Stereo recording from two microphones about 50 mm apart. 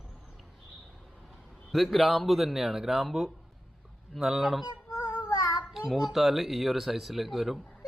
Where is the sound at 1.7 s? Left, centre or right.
Centre.